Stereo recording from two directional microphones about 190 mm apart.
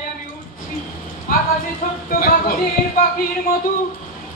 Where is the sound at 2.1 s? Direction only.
50° left (ahead or behind).